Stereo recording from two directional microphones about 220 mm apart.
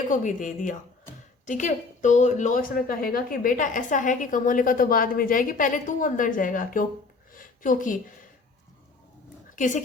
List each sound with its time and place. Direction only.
0.1 s a woman's voice: 35° left (ahead or behind)
7.3 s a sound: 35° left (ahead or behind)
9.6 s speech: 35° left (ahead or behind)